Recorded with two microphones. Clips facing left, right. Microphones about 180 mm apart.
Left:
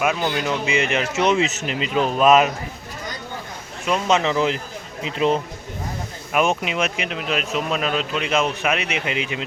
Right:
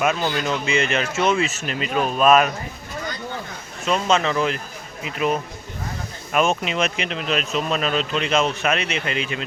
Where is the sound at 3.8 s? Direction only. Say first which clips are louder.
Even; 15° left (ahead or behind).